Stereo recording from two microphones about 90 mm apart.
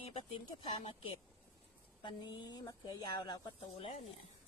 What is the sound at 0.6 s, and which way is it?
Speech, 90° left.